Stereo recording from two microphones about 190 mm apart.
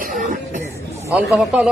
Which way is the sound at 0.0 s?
45° right (ahead or behind).